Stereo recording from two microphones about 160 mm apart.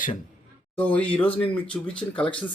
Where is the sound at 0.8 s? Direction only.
10° left (ahead or behind).